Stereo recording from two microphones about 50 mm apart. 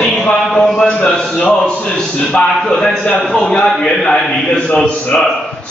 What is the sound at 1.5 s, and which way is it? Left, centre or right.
A man's voice, centre.